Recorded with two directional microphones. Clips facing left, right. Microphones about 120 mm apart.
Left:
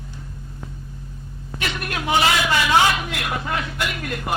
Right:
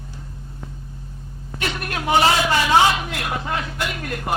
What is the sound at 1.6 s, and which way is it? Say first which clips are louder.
A man's voice: right 1 dB; 40° right (ahead or behind).